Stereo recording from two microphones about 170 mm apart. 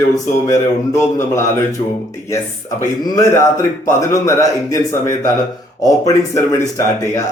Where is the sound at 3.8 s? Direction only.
15° left (ahead or behind).